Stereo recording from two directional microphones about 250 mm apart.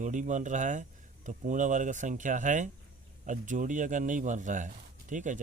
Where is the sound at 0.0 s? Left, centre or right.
Right.